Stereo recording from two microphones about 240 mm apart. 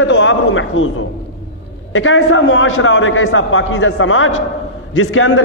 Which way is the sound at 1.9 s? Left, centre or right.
Left.